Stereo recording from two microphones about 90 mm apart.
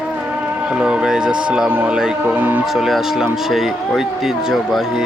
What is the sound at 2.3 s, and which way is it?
Speech, 20° right (ahead or behind).